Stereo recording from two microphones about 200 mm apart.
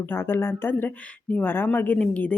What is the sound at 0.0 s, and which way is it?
Speech, 10° left (ahead or behind).